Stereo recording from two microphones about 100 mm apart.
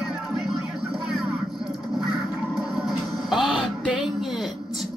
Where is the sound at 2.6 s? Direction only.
5° right (ahead or behind).